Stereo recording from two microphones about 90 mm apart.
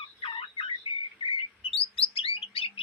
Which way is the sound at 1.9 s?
90° left.